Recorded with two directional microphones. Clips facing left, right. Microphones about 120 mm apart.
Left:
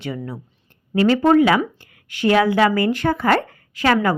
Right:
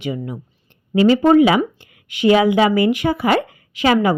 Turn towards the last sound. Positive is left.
turn(degrees=-15)  # may be behind; listen again after turning